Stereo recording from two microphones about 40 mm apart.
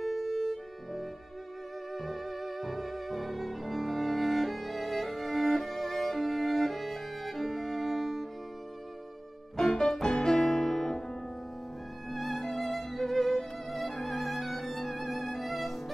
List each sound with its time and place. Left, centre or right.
0.0 s music: centre
9.6 s music: centre
12.1 s music: centre